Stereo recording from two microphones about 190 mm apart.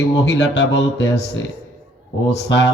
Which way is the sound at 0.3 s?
65° left (ahead or behind).